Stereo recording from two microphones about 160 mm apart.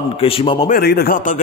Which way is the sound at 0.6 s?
70° left (ahead or behind).